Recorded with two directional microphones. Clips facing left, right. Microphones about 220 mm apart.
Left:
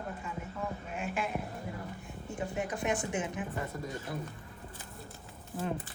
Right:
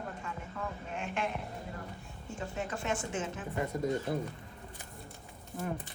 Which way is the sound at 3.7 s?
20° right (ahead or behind).